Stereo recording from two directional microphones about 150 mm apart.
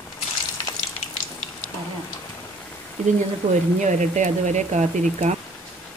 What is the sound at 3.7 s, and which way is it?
Speech, 50° right (ahead or behind).